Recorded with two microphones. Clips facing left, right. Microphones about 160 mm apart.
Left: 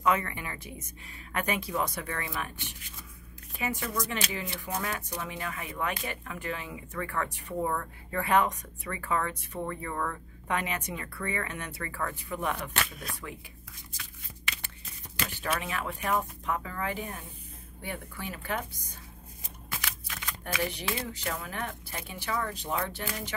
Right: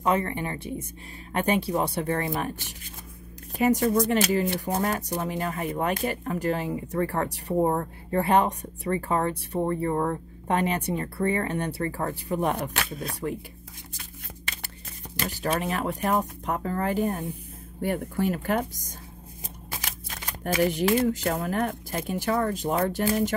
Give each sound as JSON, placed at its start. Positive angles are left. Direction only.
{"t": 0.0, "sound": "speech", "side_deg": -30}
{"t": 3.5, "sound": "speech", "side_deg": -40}
{"t": 14.4, "sound": "shuffling cards", "side_deg": -40}
{"t": 15.2, "sound": "speech", "side_deg": -40}